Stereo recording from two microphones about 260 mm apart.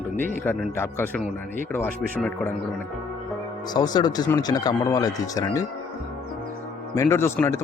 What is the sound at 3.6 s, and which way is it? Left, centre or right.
Speech, centre.